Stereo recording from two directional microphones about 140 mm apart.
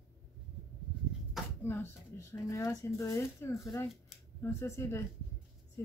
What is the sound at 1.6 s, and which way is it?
Speech, 15° left (ahead or behind).